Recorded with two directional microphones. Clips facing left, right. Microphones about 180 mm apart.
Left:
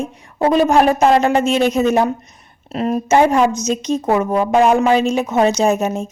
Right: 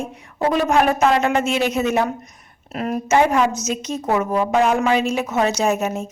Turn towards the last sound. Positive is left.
turn(degrees=30)  # may be behind; listen again after turning